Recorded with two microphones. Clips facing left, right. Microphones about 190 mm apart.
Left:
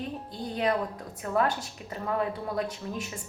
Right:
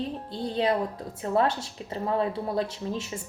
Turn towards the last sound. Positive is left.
turn(degrees=-25)  # may be behind; listen again after turning